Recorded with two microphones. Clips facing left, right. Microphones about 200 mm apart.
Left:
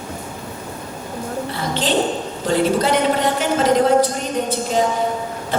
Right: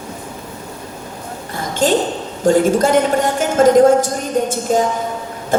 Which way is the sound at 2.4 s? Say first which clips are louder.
Right 5 dB; 45° right (ahead or behind).